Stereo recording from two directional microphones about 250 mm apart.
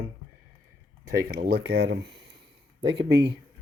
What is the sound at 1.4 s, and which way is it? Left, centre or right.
Speech, right.